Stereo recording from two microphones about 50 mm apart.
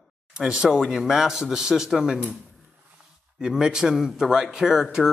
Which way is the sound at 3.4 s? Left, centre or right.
Centre.